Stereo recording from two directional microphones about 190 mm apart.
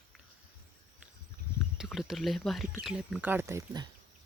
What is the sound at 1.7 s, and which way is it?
Speech, centre (ahead or behind).